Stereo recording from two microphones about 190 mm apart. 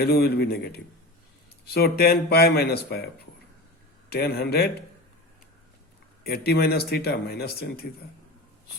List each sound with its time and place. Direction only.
0.0 s speech: 55° left (ahead or behind)
4.1 s speech: 55° left (ahead or behind)
6.2 s speech: 55° left (ahead or behind)